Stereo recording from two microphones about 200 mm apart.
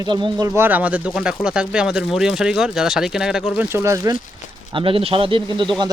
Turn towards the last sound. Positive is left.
turn(degrees=-20)  # may be behind; listen again after turning